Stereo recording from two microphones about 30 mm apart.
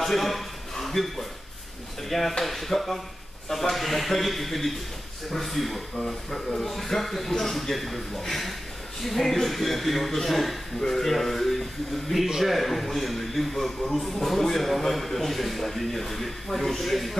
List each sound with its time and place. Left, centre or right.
0.0 s a sound: centre
2.0 s a man's voice: centre
5.9 s a man's voice: centre